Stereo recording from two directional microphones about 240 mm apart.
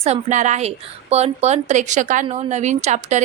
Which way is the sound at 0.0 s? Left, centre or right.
Right.